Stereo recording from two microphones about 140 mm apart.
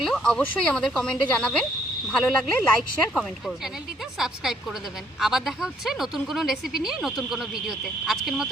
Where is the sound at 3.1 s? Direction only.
Centre (ahead or behind).